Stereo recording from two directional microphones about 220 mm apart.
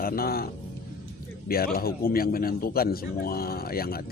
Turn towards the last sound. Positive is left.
turn(degrees=45)  # may be behind; listen again after turning